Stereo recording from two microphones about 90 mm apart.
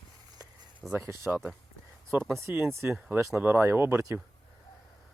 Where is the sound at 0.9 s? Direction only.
25° right (ahead or behind).